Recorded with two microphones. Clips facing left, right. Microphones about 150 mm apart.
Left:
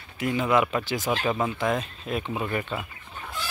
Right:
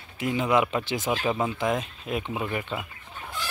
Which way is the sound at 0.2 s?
20° right (ahead or behind).